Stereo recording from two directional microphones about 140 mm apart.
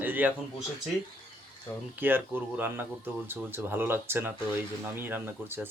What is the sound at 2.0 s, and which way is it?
Speech, 15° right (ahead or behind).